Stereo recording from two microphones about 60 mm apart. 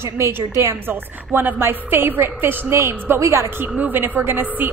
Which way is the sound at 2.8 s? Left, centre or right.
Right.